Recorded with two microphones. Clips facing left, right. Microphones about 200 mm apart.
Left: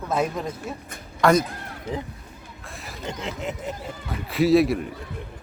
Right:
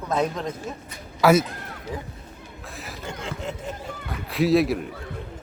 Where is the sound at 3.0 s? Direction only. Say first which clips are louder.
Left 2 dB; 20° left (ahead or behind).